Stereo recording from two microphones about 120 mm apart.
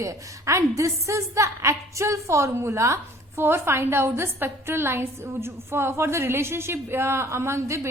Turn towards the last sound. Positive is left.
turn(degrees=-25)  # may be behind; listen again after turning